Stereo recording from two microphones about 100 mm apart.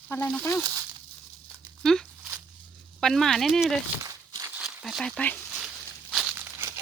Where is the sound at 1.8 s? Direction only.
5° left (ahead or behind).